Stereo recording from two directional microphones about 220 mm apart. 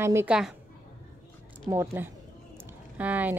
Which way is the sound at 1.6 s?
10° right (ahead or behind).